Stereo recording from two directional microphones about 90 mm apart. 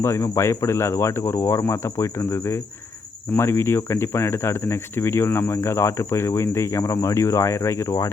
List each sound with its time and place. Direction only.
0.0 s speech: 35° left (ahead or behind)